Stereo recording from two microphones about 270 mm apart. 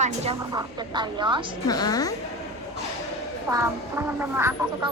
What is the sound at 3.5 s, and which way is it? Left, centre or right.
Speech, centre.